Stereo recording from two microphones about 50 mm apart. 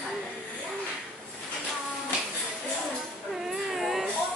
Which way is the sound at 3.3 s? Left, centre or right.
Centre.